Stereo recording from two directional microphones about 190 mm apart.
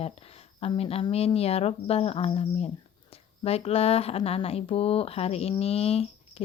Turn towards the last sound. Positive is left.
turn(degrees=30)  # may be behind; listen again after turning